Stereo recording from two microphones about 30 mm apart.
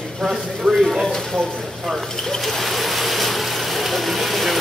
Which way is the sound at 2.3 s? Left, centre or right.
Centre.